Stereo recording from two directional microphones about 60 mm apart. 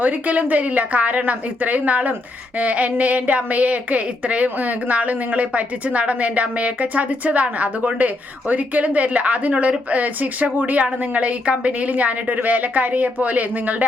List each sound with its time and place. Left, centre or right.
0.0 s a woman's voice: right